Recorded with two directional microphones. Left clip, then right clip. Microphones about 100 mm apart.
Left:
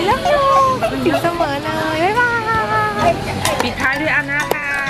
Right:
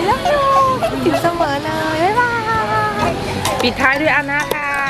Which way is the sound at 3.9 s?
40° right (ahead or behind).